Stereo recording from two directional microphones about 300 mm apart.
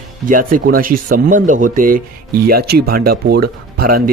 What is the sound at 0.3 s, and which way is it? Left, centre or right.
Speech, right.